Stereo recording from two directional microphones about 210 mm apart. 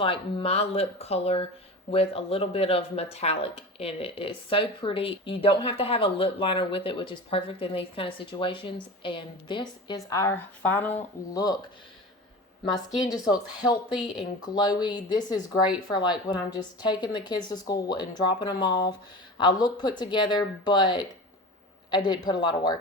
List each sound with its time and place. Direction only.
0.0 s speech: 25° left (ahead or behind)
13.1 s speech: 15° left (ahead or behind)